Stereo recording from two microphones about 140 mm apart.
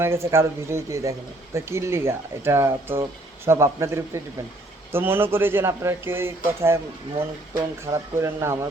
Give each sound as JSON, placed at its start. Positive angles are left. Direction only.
{"t": 0.0, "sound": "speech", "side_deg": -20}
{"t": 7.9, "sound": "speech", "side_deg": -20}